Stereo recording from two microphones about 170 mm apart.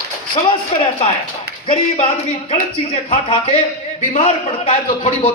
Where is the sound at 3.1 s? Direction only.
35° left (ahead or behind).